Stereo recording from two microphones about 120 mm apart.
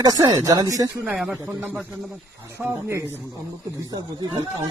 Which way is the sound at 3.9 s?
35° right (ahead or behind).